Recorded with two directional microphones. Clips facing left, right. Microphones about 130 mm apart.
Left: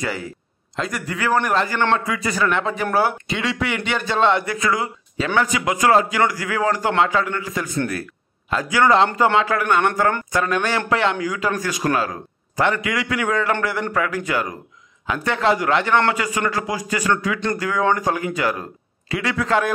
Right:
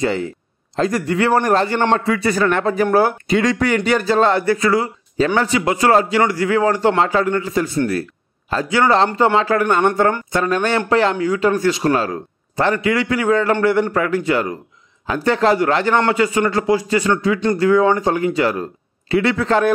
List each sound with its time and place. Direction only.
0.0 s speech: 25° right (ahead or behind)